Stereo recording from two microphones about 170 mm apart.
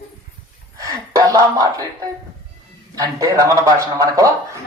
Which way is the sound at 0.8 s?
20° right (ahead or behind).